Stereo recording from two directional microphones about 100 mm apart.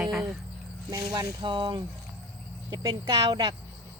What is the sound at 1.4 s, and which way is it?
Speech, 50° right (ahead or behind).